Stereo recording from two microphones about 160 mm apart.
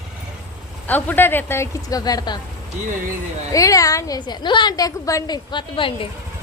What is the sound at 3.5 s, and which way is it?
A woman's voice, 20° left (ahead or behind).